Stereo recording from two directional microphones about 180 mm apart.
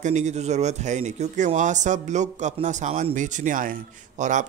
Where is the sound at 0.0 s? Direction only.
40° right (ahead or behind).